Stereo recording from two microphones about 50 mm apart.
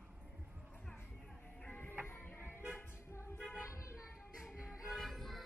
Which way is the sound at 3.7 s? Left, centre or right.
Left.